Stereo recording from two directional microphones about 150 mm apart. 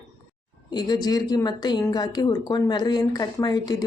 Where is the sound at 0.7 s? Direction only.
30° left (ahead or behind).